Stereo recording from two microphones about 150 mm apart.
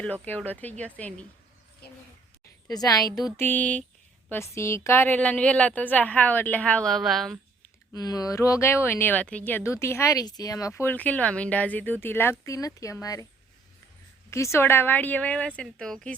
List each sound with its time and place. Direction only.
0.0 s a woman's voice: 10° left (ahead or behind)
2.6 s speech: 25° left (ahead or behind)
3.3 s a woman's voice: 10° left (ahead or behind)
7.9 s speech: 25° left (ahead or behind)
10.8 s a woman's voice: 10° left (ahead or behind)
14.3 s a woman's voice: 20° left (ahead or behind)